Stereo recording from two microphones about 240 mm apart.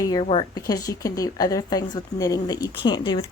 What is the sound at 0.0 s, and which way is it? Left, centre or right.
A woman's voice, centre.